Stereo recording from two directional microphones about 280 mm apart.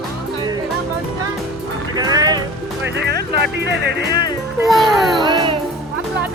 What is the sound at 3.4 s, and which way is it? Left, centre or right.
Speech, right.